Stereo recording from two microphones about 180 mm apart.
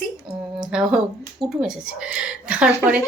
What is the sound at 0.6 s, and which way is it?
Speech, 5° right (ahead or behind).